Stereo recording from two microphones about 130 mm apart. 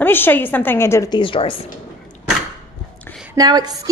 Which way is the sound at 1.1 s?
40° left (ahead or behind).